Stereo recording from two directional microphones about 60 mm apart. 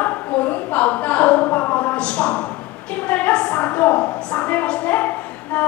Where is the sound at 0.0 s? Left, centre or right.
Left.